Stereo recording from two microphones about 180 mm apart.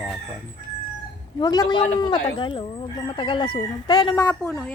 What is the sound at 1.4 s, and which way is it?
Speech, 20° left (ahead or behind).